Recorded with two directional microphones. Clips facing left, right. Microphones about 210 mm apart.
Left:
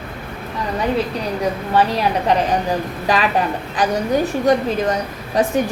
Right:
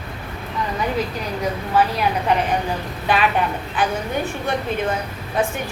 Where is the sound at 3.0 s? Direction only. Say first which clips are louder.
Even; 40° left (ahead or behind).